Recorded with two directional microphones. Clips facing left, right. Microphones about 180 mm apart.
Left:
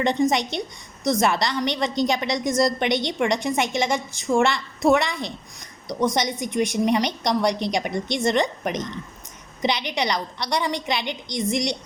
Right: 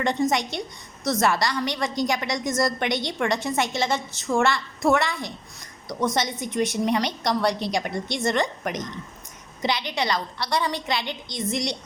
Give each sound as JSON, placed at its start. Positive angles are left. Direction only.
{"t": 0.0, "sound": "a woman's voice", "side_deg": 20}
{"t": 6.4, "sound": "a woman's voice", "side_deg": 15}